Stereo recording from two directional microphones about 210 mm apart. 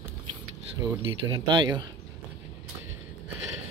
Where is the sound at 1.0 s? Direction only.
25° right (ahead or behind).